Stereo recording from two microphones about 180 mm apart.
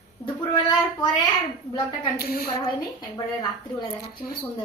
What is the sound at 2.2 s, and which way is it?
Speech, 55° left (ahead or behind).